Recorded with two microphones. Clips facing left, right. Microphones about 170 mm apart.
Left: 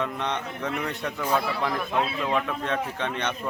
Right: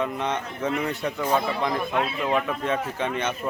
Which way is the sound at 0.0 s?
5° right (ahead or behind).